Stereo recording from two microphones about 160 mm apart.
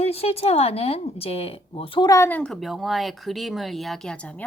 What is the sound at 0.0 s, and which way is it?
Speech, 40° left (ahead or behind).